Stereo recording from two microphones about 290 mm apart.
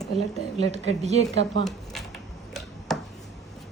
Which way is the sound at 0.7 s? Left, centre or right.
Right.